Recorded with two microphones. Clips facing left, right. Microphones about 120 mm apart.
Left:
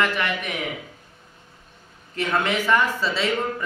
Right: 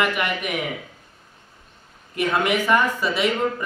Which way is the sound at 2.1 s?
15° right (ahead or behind).